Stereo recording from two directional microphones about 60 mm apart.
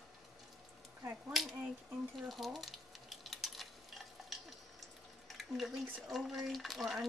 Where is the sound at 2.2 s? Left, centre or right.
Centre.